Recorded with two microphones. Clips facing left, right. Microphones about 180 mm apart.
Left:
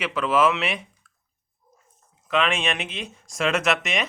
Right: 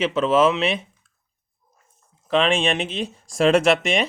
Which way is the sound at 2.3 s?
30° right (ahead or behind).